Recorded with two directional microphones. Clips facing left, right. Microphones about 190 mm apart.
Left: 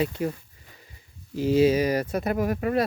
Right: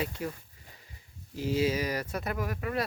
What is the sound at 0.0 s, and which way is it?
Speech, 25° left (ahead or behind).